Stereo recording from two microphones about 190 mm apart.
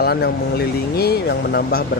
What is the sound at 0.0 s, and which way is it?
Speech, 55° left (ahead or behind).